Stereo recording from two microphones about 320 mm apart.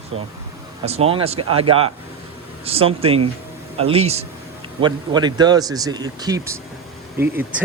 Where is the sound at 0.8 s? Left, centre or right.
Centre.